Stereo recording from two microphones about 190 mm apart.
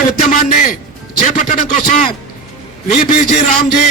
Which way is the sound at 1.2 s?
40° left (ahead or behind).